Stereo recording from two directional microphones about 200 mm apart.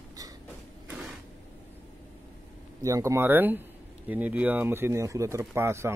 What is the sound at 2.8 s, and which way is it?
Speech, 15° right (ahead or behind).